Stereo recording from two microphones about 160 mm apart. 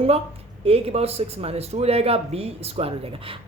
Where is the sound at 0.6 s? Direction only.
40° right (ahead or behind).